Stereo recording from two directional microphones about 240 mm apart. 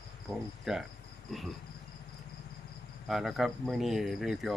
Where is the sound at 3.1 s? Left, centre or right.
Centre.